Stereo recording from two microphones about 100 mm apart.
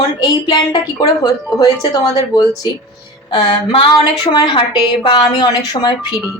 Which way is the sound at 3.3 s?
55° left (ahead or behind).